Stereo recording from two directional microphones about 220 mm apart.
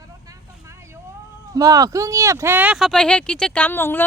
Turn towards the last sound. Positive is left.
turn(degrees=10)  # may be behind; listen again after turning